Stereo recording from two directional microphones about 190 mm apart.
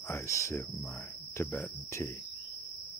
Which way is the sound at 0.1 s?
15° left (ahead or behind).